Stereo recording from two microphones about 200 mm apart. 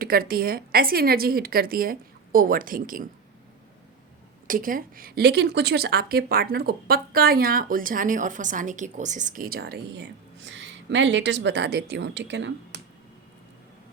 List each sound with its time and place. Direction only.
0.0 s speech: 50° right (ahead or behind)
4.4 s speech: 45° right (ahead or behind); by 12.8 s 60° right (ahead or behind)